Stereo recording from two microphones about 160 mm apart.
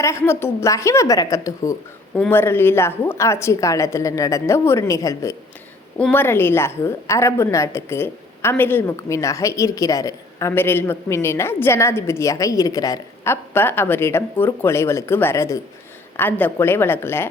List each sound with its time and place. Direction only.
0.0 s a woman's voice: 15° left (ahead or behind)